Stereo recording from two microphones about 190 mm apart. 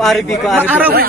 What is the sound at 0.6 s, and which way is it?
Speech, 10° right (ahead or behind).